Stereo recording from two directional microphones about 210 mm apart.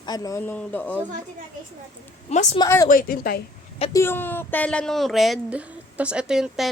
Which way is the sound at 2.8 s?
40° left (ahead or behind).